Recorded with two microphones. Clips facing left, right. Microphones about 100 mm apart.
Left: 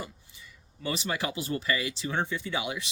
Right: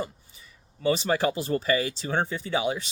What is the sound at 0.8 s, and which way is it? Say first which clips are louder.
Speech: right 8 dB; 35° right (ahead or behind).